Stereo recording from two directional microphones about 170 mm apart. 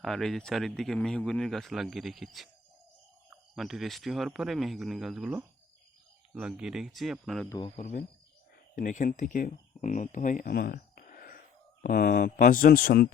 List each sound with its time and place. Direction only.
0.0 s speech: centre (ahead or behind)
3.5 s speech: centre (ahead or behind)
7.8 s speech: 45° left (ahead or behind); by 13.1 s 60° left (ahead or behind)